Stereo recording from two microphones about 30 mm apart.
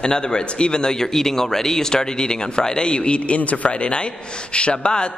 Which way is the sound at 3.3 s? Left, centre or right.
Left.